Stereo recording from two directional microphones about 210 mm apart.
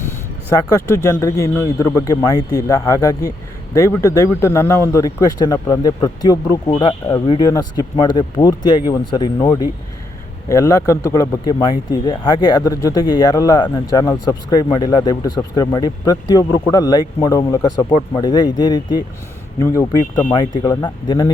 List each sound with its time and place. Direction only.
0.5 s speech: 15° left (ahead or behind)